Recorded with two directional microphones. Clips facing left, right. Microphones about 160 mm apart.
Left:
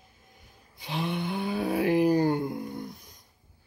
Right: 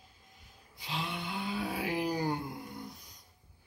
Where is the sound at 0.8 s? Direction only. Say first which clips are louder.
Left 7 dB; 55° left (ahead or behind).